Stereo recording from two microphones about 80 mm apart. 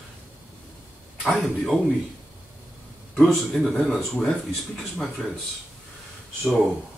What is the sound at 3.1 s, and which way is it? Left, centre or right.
Speech, centre.